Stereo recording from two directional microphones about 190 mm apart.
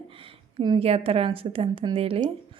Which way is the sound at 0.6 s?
25° right (ahead or behind).